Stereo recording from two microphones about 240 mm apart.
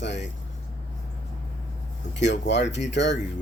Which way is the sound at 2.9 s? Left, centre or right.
Left.